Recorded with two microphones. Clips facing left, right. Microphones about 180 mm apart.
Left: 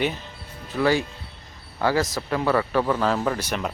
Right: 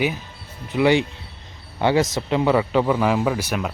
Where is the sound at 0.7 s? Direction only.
20° right (ahead or behind).